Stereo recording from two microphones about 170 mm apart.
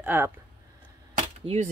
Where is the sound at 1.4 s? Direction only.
35° right (ahead or behind).